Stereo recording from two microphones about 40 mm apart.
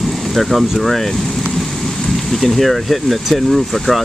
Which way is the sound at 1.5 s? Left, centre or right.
Centre.